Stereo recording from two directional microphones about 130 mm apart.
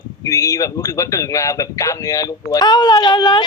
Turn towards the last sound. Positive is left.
turn(degrees=35)  # may be behind; listen again after turning